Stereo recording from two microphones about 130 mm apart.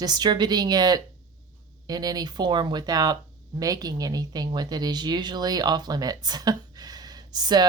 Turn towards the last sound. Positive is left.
turn(degrees=-35)  # may be behind; listen again after turning